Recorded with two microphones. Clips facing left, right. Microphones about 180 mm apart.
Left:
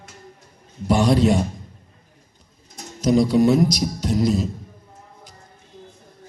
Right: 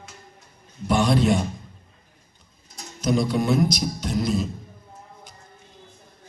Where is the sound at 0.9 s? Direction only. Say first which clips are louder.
Left 3 dB; 35° left (ahead or behind).